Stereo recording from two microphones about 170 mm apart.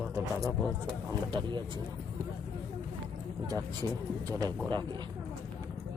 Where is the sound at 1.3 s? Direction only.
25° right (ahead or behind).